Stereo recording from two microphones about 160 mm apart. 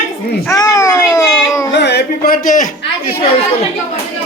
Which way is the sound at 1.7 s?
90° left.